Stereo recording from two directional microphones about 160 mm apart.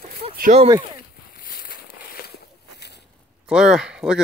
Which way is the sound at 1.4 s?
65° left (ahead or behind).